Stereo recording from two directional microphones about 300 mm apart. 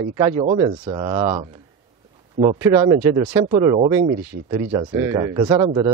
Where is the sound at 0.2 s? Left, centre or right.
Centre.